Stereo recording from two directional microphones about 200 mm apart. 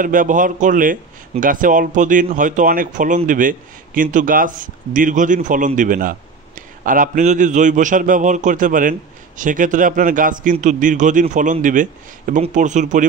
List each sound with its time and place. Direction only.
0.0 s speech: 40° right (ahead or behind)